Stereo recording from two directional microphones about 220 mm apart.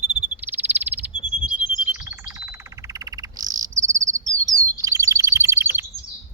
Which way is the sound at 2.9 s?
15° right (ahead or behind).